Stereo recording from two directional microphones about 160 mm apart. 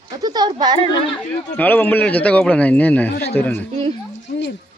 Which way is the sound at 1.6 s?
10° left (ahead or behind).